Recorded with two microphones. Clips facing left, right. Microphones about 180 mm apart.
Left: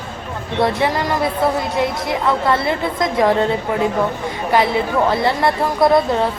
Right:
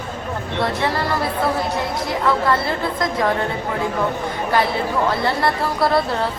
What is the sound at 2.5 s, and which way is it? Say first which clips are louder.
Speech: left 2 dB; 20° left (ahead or behind).